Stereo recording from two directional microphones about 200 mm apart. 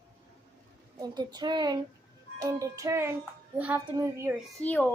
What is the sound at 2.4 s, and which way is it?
Music, 15° right (ahead or behind).